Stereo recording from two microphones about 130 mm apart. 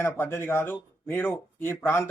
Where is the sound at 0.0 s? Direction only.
15° left (ahead or behind).